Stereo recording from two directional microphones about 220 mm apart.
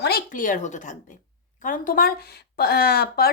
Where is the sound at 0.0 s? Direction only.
45° left (ahead or behind).